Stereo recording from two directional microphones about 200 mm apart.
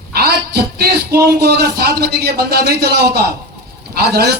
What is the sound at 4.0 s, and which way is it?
Speech, 50° right (ahead or behind).